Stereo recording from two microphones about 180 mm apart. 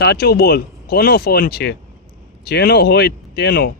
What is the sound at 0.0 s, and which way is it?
Speech, 60° left (ahead or behind).